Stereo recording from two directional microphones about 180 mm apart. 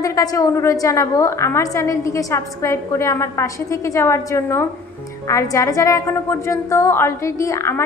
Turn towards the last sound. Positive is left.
turn(degrees=15)  # may be behind; listen again after turning